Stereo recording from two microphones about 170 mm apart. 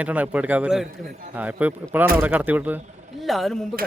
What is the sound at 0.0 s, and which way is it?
A man's voice, 10° right (ahead or behind).